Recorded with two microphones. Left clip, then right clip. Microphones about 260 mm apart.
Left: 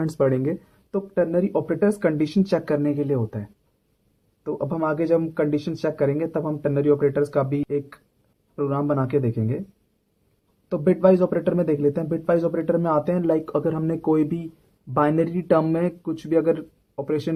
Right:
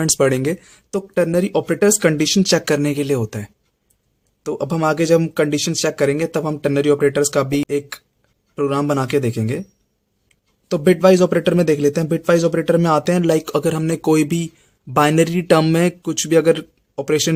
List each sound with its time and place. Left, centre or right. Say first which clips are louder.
0.0 s a man's voice: right 5 dB; right
4.4 s a man's voice: right 5 dB; right
10.7 s a man's voice: right 5 dB; right